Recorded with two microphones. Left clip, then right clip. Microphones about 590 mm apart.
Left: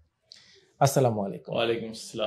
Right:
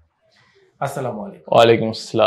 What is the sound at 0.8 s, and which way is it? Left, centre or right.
Speech, left.